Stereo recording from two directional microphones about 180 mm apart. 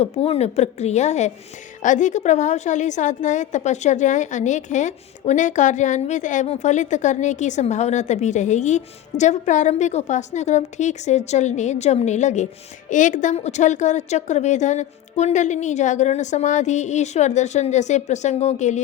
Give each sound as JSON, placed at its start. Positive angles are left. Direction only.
{"t": 0.0, "sound": "a woman's voice", "side_deg": 35}